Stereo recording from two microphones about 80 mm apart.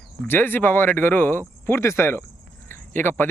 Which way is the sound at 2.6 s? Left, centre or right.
Left.